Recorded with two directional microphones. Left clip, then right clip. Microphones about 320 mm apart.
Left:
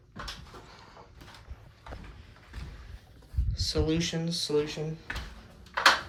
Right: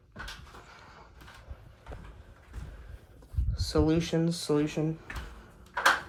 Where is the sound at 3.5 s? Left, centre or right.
Centre.